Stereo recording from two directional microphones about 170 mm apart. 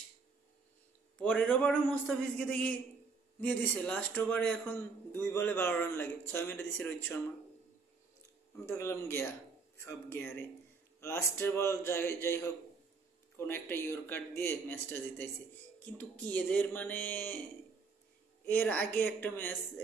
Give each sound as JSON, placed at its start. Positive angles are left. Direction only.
{"t": 1.1, "sound": "a man's voice", "side_deg": 10}
{"t": 8.6, "sound": "a man's voice", "side_deg": 15}
{"t": 18.5, "sound": "a man's voice", "side_deg": 10}